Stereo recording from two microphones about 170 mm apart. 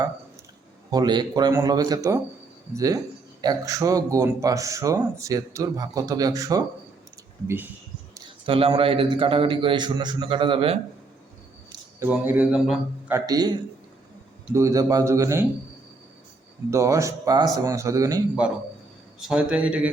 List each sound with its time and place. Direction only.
0.9 s a man's voice: 25° right (ahead or behind)
8.4 s a man's voice: 30° right (ahead or behind)
12.0 s speech: 10° right (ahead or behind)
13.1 s a man's voice: 20° right (ahead or behind)
16.6 s speech: 15° right (ahead or behind)
19.2 s speech: 5° right (ahead or behind)